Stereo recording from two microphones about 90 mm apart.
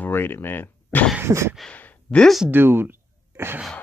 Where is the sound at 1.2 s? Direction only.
30° right (ahead or behind).